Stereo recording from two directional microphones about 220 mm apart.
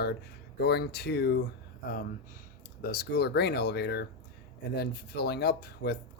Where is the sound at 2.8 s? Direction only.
45° left (ahead or behind).